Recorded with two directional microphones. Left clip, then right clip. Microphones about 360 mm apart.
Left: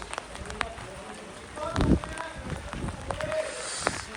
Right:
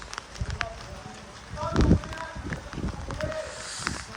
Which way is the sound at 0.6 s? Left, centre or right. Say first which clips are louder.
Even; centre.